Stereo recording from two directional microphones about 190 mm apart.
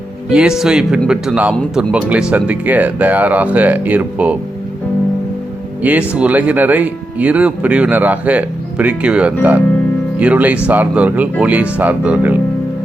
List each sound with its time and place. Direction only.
0.3 s speech: 5° right (ahead or behind)
5.8 s speech: 5° right (ahead or behind)